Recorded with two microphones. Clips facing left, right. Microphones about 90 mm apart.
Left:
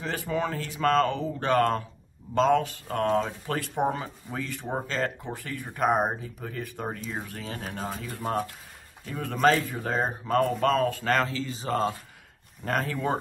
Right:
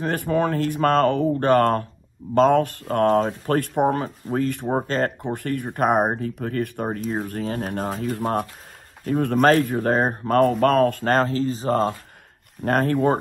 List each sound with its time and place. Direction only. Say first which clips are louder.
0.0 s speech: right 7 dB; 50° right (ahead or behind)
11.1 s speech: right 7 dB; 40° right (ahead or behind)
12.6 s speech: right 8 dB; 55° right (ahead or behind)